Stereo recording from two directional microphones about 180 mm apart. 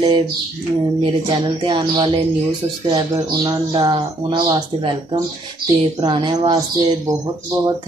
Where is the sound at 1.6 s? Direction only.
25° right (ahead or behind).